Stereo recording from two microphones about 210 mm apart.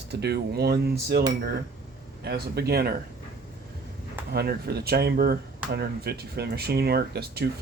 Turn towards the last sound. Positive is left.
turn(degrees=-50)  # may be behind; listen again after turning